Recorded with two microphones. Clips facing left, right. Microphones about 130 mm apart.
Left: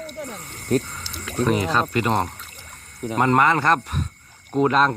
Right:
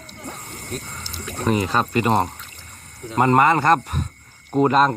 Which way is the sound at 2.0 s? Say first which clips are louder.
Right 3 dB; 5° right (ahead or behind).